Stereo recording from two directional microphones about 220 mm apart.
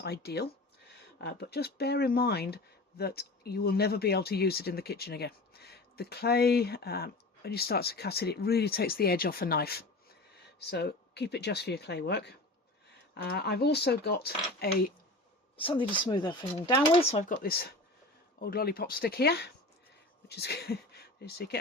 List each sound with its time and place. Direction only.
0.0 s speech: 45° left (ahead or behind)
15.5 s speech: 25° left (ahead or behind); by 21.6 s 45° left (ahead or behind)